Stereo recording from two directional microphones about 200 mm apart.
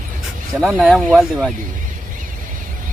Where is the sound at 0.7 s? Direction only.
Centre (ahead or behind).